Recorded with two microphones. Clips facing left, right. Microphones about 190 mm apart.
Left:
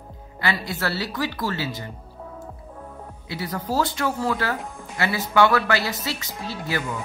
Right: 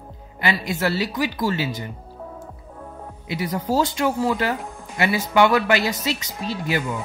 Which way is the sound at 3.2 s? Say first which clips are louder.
Right 4 dB; 15° right (ahead or behind).